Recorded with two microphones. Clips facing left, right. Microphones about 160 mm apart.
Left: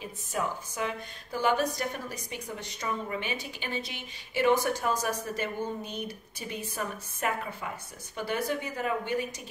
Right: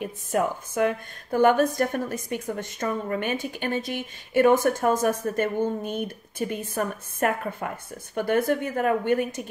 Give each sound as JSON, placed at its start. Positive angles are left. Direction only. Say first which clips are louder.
{"t": 0.0, "sound": "a woman's voice", "louder": "right 8 dB", "side_deg": -55}